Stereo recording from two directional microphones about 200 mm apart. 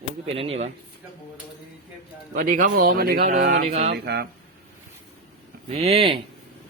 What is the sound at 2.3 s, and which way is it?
Speech, 45° right (ahead or behind).